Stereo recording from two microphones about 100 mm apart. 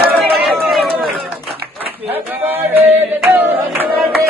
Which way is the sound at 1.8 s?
20° right (ahead or behind).